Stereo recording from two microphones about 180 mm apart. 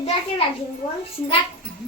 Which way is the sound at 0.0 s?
35° left (ahead or behind).